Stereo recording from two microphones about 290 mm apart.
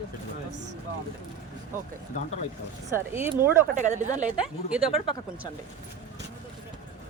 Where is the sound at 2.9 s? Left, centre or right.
Centre.